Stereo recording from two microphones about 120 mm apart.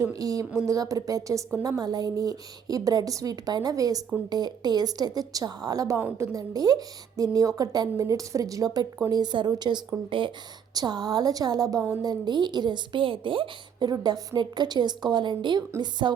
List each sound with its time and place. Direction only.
0.0 s a woman's voice: 30° right (ahead or behind)